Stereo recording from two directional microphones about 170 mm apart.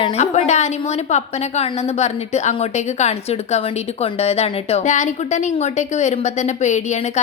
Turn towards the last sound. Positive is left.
turn(degrees=45)  # may be behind; listen again after turning